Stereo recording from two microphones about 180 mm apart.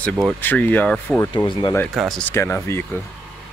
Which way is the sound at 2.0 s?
5° left (ahead or behind).